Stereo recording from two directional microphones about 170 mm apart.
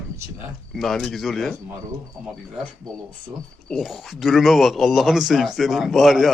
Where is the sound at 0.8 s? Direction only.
Centre (ahead or behind).